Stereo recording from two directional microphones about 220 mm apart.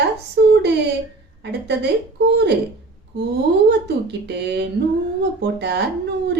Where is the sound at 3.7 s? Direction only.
50° right (ahead or behind).